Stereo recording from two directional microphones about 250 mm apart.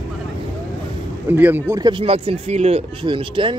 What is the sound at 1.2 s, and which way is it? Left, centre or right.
Speech, centre.